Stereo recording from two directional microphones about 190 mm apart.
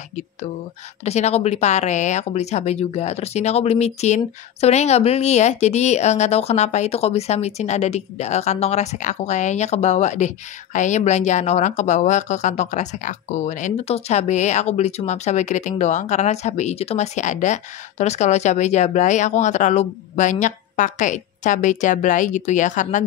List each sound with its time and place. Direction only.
1.0 s speech: 35° left (ahead or behind)